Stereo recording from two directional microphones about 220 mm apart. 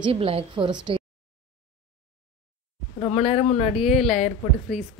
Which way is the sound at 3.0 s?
25° left (ahead or behind).